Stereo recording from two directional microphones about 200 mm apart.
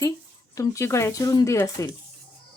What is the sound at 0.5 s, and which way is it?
Speech, 15° left (ahead or behind).